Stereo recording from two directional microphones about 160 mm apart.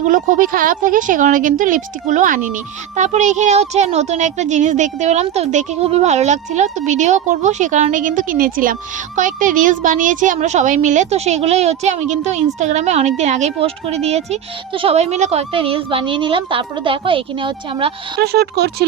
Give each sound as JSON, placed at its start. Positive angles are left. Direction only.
{"t": 0.0, "sound": "a child's voice", "side_deg": -55}
{"t": 18.2, "sound": "speech", "side_deg": -85}